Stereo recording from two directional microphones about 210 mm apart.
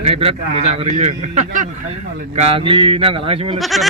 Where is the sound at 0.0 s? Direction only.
30° right (ahead or behind).